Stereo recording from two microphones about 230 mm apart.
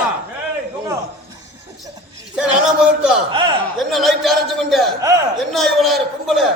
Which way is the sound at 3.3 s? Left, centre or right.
Right.